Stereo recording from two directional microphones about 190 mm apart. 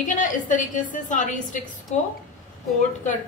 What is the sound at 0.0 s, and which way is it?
A woman's voice, 40° left (ahead or behind).